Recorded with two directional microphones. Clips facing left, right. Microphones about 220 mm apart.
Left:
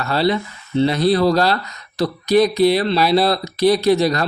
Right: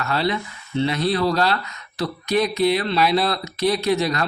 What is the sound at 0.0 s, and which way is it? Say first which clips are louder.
Speech: left 5 dB; 35° left (ahead or behind).